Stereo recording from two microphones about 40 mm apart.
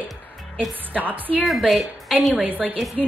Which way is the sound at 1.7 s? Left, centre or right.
Centre.